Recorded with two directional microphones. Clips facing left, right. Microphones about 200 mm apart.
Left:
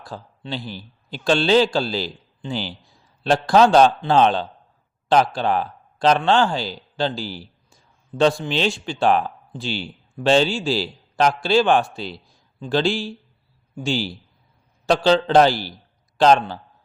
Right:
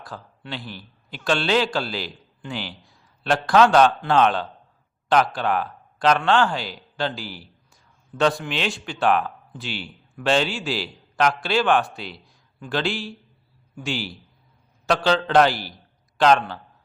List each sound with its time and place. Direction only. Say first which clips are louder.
0.0 s speech: left 3 dB; 30° left (ahead or behind)